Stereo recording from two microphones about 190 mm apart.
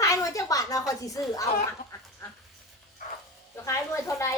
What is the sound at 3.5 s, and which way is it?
Speech, 15° left (ahead or behind).